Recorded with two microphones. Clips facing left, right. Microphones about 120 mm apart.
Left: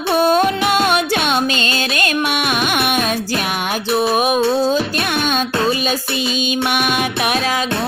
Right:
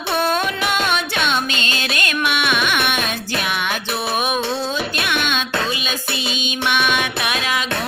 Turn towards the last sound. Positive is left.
turn(degrees=35)  # may be behind; listen again after turning